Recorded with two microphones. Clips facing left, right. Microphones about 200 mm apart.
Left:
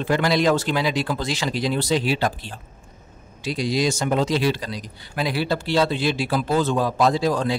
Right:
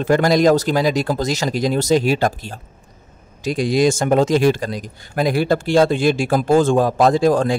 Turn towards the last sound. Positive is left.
turn(degrees=-50)  # may be behind; listen again after turning